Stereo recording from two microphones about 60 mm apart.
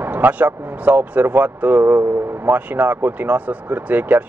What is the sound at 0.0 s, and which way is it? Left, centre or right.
Speech, right.